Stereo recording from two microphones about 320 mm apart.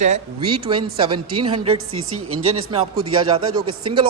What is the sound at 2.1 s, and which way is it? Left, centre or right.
Speech, right.